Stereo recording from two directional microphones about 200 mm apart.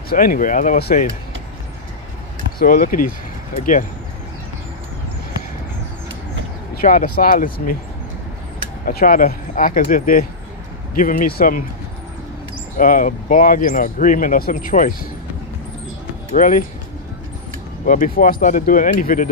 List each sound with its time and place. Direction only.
0.1 s speech: 45° left (ahead or behind)
2.6 s speech: 45° left (ahead or behind)
6.7 s speech: 45° left (ahead or behind)
8.8 s speech: 45° left (ahead or behind)
12.7 s speech: 40° left (ahead or behind)
16.3 s speech: 40° left (ahead or behind)
17.8 s speech: 40° left (ahead or behind)